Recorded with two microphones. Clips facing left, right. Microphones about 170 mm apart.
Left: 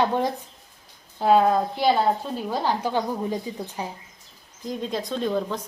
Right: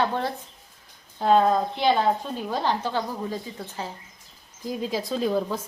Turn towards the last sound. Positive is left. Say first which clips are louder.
# right 1 dB
turn(degrees=-5)  # may be behind; listen again after turning